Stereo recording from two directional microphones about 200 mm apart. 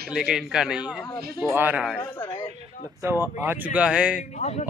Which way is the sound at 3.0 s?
10° right (ahead or behind).